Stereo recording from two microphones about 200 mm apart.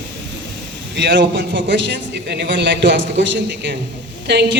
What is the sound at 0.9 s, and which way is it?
A man's voice, 60° right (ahead or behind).